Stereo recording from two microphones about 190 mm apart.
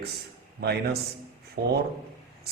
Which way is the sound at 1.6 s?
55° right (ahead or behind).